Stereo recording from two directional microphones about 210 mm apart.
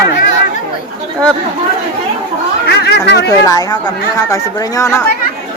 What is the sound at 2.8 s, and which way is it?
Speech, 55° left (ahead or behind).